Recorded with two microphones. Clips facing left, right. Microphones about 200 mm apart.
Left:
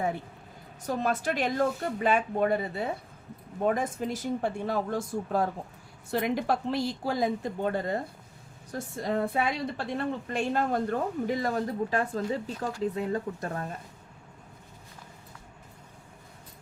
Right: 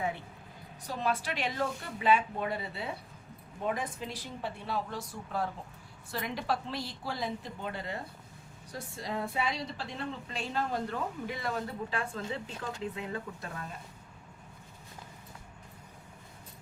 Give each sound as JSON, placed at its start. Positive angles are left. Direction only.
{"t": 0.9, "sound": "a woman's voice", "side_deg": 45}